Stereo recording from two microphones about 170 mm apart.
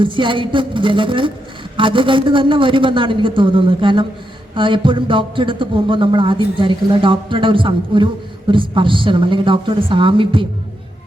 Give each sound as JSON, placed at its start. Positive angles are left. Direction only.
{"t": 0.0, "sound": "speech", "side_deg": -30}